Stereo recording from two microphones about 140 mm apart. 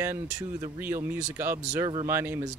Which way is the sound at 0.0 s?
20° right (ahead or behind).